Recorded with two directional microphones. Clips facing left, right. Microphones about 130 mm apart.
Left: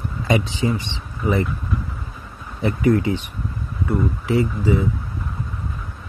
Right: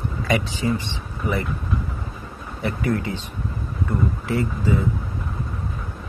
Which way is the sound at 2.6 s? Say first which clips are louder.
Left 6 dB; 20° left (ahead or behind).